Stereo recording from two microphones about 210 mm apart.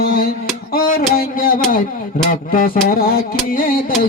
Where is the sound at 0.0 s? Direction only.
45° left (ahead or behind).